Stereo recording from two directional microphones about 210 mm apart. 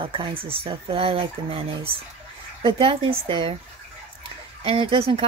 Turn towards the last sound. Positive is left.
turn(degrees=-25)  # may be behind; listen again after turning